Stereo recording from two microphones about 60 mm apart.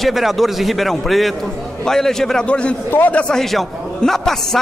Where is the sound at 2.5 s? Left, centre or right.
Centre.